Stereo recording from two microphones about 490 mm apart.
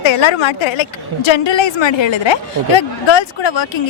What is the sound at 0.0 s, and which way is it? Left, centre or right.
A woman's voice, left.